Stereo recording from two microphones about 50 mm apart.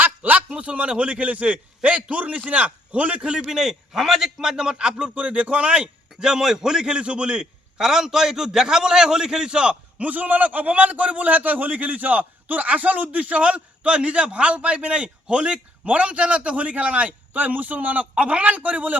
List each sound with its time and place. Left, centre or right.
0.0 s a man's voice: right
3.4 s a man's voice: centre
10.1 s a man's voice: right